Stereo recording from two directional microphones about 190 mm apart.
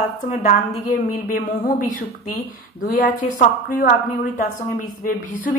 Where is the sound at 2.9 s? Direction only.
45° left (ahead or behind).